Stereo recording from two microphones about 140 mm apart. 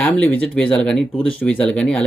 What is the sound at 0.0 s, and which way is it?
Speech, 10° left (ahead or behind).